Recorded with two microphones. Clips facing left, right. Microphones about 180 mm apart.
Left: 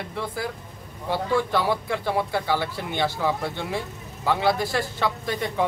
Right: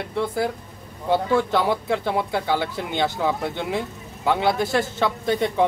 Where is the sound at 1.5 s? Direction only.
20° right (ahead or behind).